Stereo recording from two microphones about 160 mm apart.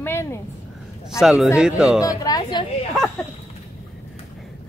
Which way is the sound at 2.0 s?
25° left (ahead or behind).